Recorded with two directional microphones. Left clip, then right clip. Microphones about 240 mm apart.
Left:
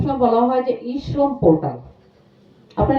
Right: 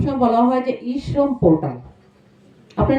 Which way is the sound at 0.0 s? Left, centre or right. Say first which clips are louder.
Even; centre.